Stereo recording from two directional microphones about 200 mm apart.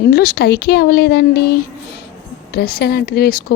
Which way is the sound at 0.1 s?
50° left (ahead or behind).